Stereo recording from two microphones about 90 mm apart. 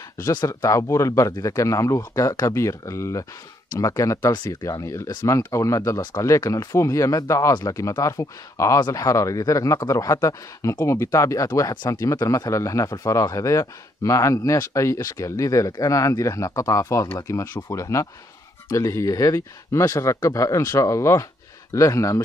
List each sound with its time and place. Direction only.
0.5 s speech: 35° left (ahead or behind)